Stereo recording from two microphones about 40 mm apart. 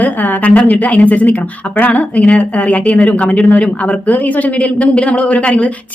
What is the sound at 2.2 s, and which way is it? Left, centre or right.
A woman's voice, left.